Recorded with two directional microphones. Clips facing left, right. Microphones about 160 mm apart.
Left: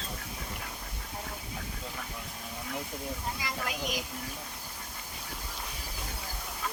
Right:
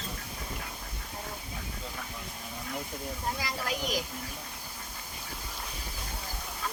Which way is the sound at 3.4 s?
35° right (ahead or behind).